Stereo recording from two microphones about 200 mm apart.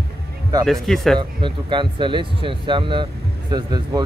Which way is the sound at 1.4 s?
25° right (ahead or behind).